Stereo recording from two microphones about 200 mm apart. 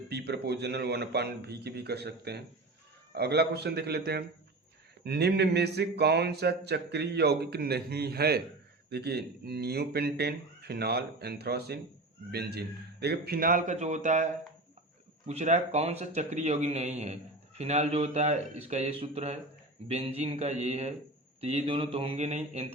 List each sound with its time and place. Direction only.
0.1 s speech: 55° right (ahead or behind); by 14.3 s 35° right (ahead or behind)
15.3 s a man's voice: 35° right (ahead or behind)
21.4 s mantra: 30° right (ahead or behind)